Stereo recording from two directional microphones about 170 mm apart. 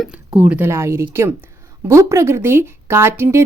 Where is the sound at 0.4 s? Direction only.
10° right (ahead or behind).